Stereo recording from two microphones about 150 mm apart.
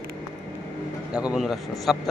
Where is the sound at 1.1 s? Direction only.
5° right (ahead or behind).